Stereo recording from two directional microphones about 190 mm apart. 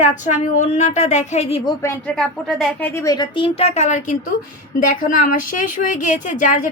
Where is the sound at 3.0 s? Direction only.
20° left (ahead or behind).